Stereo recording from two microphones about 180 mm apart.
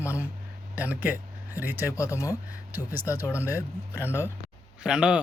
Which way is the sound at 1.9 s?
15° left (ahead or behind).